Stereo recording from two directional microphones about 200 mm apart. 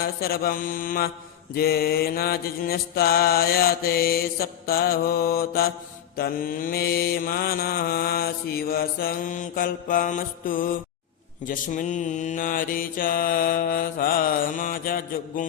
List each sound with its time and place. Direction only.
0.0 s mantra: 50° left (ahead or behind)